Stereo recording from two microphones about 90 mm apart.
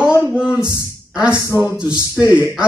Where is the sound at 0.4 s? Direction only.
10° right (ahead or behind).